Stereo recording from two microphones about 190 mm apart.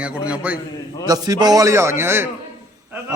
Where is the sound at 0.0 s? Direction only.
5° right (ahead or behind).